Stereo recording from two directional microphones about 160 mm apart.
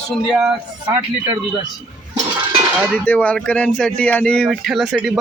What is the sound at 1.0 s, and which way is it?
Speech, 30° right (ahead or behind).